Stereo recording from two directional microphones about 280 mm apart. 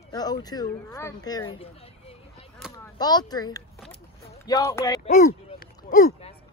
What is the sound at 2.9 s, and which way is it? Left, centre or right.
Speech, centre.